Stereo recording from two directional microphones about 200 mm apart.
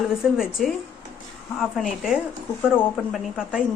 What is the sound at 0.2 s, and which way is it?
Speech, 5° right (ahead or behind).